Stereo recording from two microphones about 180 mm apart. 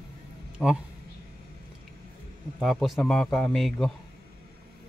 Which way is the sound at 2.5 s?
Centre (ahead or behind).